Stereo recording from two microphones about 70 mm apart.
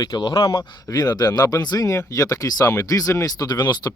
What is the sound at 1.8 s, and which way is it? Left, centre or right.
Speech, left.